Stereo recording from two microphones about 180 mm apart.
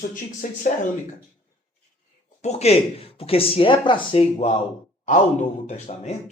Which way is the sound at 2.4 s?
35° left (ahead or behind).